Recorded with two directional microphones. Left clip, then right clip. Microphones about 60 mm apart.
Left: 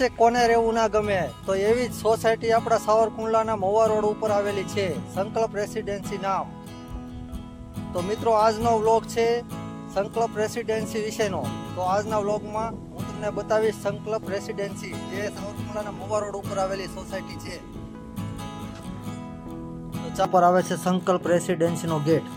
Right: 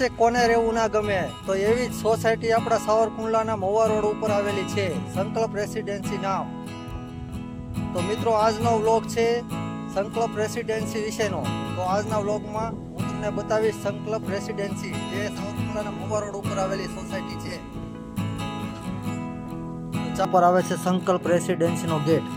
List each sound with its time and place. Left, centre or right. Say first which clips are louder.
0.0 s speech: left 1 dB; left
8.0 s speech: left 1 dB; left
15.1 s music: left 1 dB; left
20.3 s speech: even; centre